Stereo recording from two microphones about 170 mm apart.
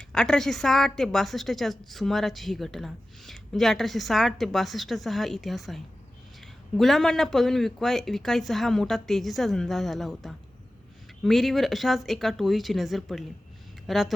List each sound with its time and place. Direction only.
0.1 s a woman's voice: 5° left (ahead or behind)